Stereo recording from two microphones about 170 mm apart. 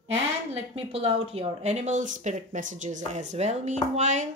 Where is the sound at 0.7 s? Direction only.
35° right (ahead or behind).